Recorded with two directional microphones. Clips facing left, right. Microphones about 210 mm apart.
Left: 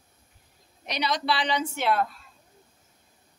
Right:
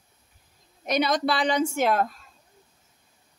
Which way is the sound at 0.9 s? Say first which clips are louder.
Right 5 dB; 50° right (ahead or behind).